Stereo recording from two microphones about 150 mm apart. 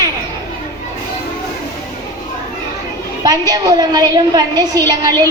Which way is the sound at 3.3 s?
25° right (ahead or behind).